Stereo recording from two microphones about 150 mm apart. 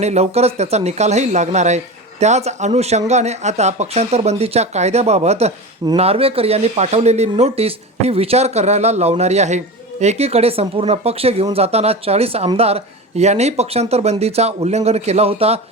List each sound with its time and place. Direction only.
0.0 s speech: 45° right (ahead or behind)